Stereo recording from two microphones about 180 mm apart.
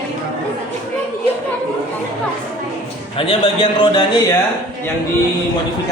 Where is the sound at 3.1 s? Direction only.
30° left (ahead or behind).